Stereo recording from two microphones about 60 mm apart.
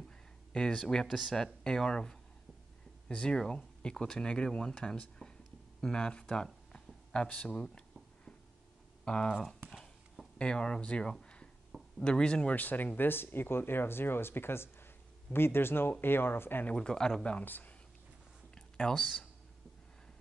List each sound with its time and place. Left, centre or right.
0.5 s speech: centre
1.0 s speech: centre
1.3 s speech: centre
9.0 s speech: centre
12.5 s speech: left
16.7 s speech: centre
17.5 s speech: left
18.5 s a sound: centre